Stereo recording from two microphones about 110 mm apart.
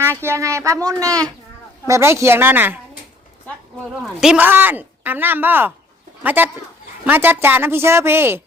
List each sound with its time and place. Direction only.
0.0 s a woman's voice: 20° right (ahead or behind)
4.0 s a man's voice: 5° right (ahead or behind)
4.4 s a woman's voice: 15° right (ahead or behind)